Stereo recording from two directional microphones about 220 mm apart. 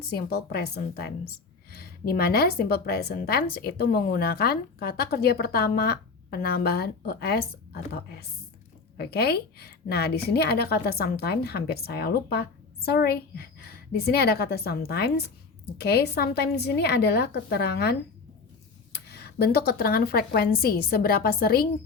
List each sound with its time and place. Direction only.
0.1 s a woman's voice: 45° left (ahead or behind)
18.9 s a woman's voice: 45° left (ahead or behind)